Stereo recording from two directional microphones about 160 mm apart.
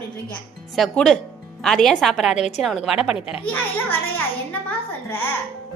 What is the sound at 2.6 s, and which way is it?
Speech, centre (ahead or behind).